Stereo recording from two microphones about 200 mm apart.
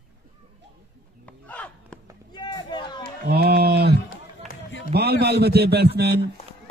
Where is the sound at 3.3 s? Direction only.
55° right (ahead or behind).